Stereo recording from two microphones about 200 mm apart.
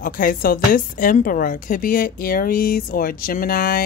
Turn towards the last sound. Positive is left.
turn(degrees=45)  # may be behind; listen again after turning